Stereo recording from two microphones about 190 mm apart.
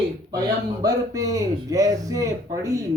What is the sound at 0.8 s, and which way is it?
A man's voice, 20° right (ahead or behind).